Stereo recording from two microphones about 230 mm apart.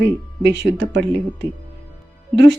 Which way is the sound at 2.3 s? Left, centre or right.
Right.